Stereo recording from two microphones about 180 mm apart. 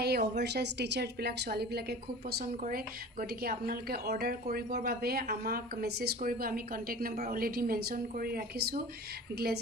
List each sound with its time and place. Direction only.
0.0 s a woman's voice: 65° right (ahead or behind)